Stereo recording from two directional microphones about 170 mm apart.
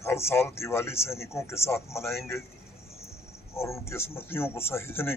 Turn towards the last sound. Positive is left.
turn(degrees=15)  # may be behind; listen again after turning